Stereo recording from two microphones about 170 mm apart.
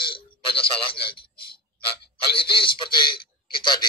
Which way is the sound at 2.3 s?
30° left (ahead or behind).